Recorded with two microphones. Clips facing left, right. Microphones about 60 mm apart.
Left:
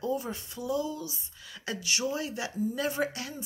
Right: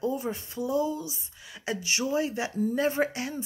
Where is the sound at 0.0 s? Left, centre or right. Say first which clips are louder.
Right 2 dB; right.